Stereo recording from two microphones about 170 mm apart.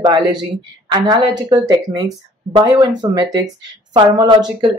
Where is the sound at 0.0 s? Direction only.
25° right (ahead or behind).